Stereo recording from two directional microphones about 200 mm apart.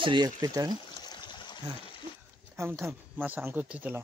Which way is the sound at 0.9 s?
20° left (ahead or behind).